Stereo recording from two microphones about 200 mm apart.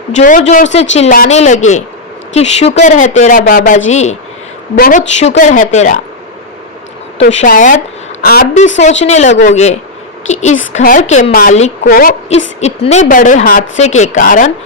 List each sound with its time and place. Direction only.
0.2 s a woman's voice: 35° left (ahead or behind)
7.2 s speech: 45° left (ahead or behind)
8.8 s a woman's voice: 35° left (ahead or behind)
11.9 s speech: 50° left (ahead or behind)
12.5 s a woman's voice: 35° left (ahead or behind)